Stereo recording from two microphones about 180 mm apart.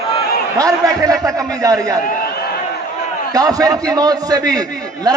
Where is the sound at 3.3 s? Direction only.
20° right (ahead or behind).